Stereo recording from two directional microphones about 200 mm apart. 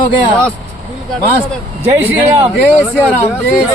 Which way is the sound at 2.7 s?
10° left (ahead or behind).